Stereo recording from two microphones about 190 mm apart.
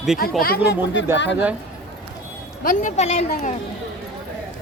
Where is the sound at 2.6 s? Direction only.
40° left (ahead or behind).